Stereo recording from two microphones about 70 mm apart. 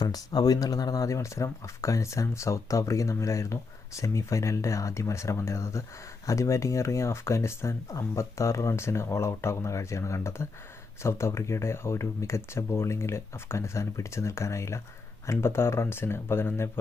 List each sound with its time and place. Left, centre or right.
0.0 s speech: left